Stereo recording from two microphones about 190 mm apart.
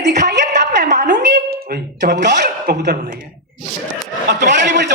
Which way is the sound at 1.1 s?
65° right (ahead or behind).